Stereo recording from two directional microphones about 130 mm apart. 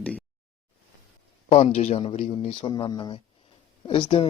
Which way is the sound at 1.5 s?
60° left (ahead or behind).